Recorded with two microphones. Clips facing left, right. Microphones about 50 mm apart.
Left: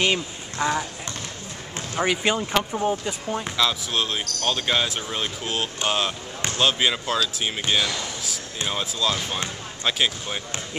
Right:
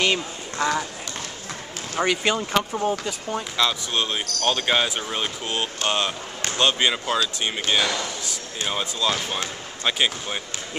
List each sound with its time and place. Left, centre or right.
0.0 s speech: centre
2.0 s speech: centre